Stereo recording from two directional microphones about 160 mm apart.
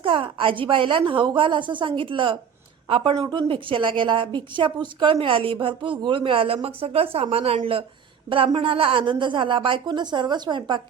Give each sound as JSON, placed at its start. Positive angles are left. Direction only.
{"t": 0.0, "sound": "a woman's voice", "side_deg": -35}